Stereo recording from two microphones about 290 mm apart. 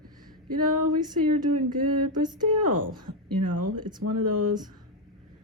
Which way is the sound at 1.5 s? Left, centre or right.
Right.